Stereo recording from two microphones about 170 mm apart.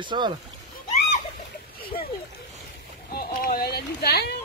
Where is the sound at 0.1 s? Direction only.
30° right (ahead or behind).